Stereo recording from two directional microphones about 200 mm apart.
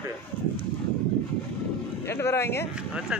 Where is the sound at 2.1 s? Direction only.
10° left (ahead or behind).